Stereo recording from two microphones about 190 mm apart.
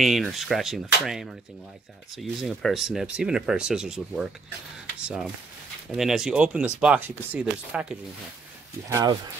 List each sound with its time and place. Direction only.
0.0 s speech: centre (ahead or behind)
8.8 s speech: 15° right (ahead or behind)